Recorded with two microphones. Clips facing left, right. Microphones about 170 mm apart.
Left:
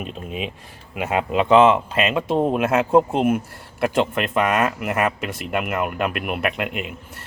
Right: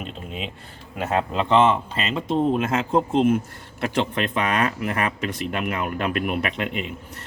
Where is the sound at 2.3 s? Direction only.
55° left (ahead or behind).